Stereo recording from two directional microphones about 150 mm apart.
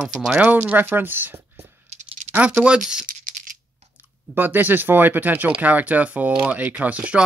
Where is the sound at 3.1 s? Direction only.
65° right (ahead or behind).